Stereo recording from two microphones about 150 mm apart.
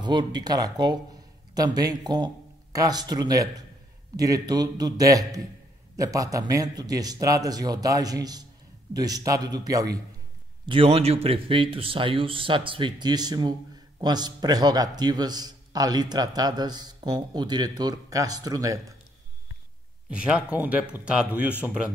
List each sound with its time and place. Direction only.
0.0 s speech: 30° right (ahead or behind)
10.7 s speech: 40° right (ahead or behind); by 18.9 s 20° right (ahead or behind)
20.1 s speech: 5° right (ahead or behind)